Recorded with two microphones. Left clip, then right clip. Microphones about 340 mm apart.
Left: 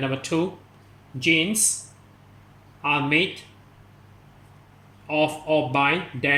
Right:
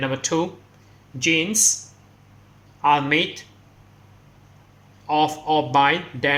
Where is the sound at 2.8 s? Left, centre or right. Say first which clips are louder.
Right 4 dB; centre.